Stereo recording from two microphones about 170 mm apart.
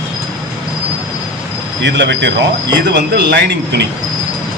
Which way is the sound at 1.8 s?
90° right.